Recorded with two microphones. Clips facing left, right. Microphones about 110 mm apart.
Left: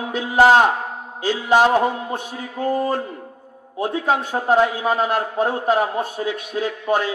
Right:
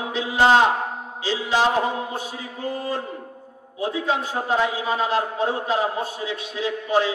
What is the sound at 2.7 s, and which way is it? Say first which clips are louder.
A man's voice: left 6 dB; 50° left (ahead or behind).